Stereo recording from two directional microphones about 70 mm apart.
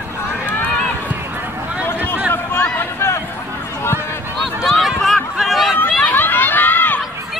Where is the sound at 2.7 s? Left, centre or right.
Left.